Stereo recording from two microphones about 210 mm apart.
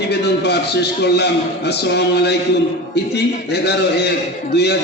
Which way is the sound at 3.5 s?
50° left (ahead or behind).